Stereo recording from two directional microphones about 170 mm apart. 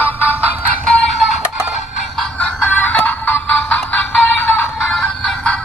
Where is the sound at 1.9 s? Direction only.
5° left (ahead or behind).